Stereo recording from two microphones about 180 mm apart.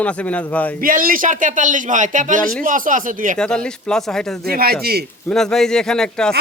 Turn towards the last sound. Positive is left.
turn(degrees=5)  # may be behind; listen again after turning